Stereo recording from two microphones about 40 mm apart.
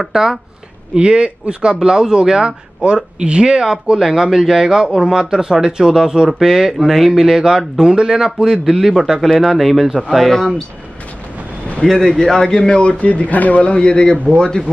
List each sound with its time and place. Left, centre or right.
0.0 s a man's voice: centre
0.9 s a man's voice: right; by 9.8 s centre
9.8 s a man's voice: centre
10.1 s a man's voice: centre
11.8 s a man's voice: centre
12.7 s speech: left